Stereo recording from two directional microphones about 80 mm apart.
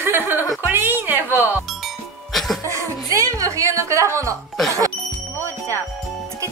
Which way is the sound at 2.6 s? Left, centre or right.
Right.